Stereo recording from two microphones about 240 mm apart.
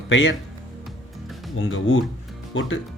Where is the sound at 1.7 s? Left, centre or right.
Left.